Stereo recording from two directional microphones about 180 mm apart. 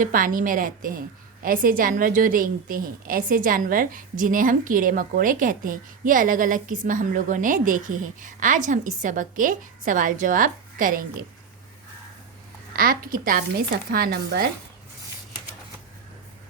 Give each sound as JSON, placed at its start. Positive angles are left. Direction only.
{"t": 0.0, "sound": "a woman's voice", "side_deg": -50}
{"t": 12.7, "sound": "a woman's voice", "side_deg": -55}